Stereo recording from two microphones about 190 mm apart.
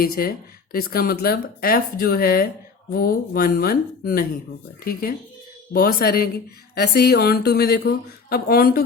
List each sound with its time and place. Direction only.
0.0 s a woman's voice: 50° left (ahead or behind)